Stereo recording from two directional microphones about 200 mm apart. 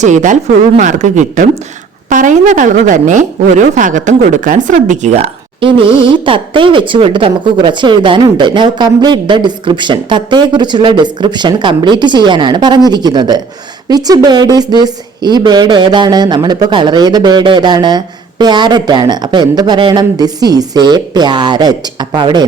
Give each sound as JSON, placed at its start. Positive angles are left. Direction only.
{"t": 0.0, "sound": "a woman's voice", "side_deg": -35}